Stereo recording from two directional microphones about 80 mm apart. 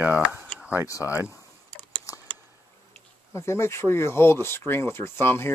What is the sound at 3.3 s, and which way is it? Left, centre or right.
Speech, left.